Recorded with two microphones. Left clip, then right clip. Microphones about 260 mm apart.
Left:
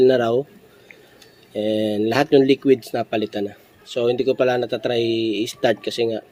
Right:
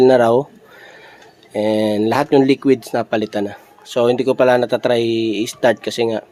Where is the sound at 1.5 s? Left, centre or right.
Centre.